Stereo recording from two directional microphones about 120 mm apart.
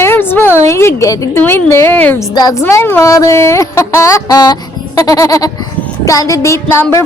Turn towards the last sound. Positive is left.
turn(degrees=25)  # may be behind; listen again after turning